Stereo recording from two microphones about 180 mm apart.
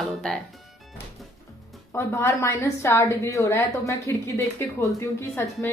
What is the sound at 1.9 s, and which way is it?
A woman's voice, 15° left (ahead or behind).